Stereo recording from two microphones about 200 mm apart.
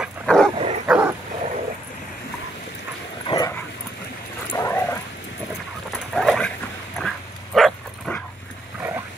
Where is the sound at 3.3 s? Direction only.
20° left (ahead or behind).